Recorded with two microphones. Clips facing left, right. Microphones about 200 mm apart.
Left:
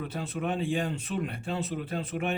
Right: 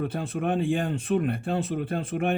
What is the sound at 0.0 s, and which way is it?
Speech, 55° right (ahead or behind).